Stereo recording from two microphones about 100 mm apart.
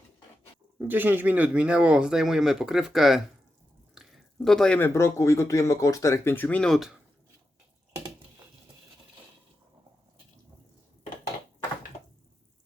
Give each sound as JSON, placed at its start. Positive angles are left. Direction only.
{"t": 0.8, "sound": "speech", "side_deg": -20}
{"t": 4.4, "sound": "speech", "side_deg": 5}
{"t": 4.8, "sound": "speech", "side_deg": 30}
{"t": 6.3, "sound": "speech", "side_deg": 20}
{"t": 6.6, "sound": "speech", "side_deg": 0}